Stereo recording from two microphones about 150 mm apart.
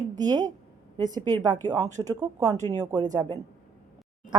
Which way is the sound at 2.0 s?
15° right (ahead or behind).